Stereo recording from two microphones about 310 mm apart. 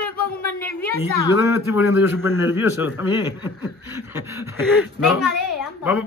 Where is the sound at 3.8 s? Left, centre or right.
Centre.